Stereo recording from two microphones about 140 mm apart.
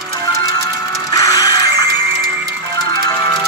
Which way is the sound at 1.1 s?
25° left (ahead or behind).